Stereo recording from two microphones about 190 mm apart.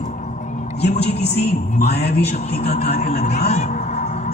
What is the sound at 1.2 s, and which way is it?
Speech, 60° left (ahead or behind).